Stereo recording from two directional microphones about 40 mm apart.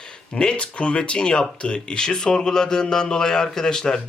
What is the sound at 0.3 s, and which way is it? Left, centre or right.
Speech, left.